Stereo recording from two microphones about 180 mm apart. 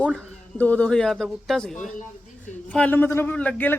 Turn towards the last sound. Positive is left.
turn(degrees=10)  # may be behind; listen again after turning